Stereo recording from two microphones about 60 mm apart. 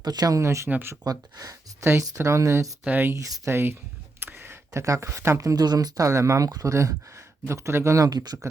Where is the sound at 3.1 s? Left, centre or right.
Right.